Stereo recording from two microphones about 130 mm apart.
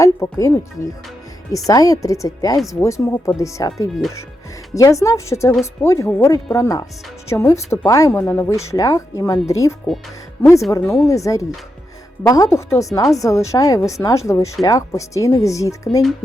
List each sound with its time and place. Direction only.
0.0 s speech: 25° left (ahead or behind)
8.2 s speech: 15° left (ahead or behind)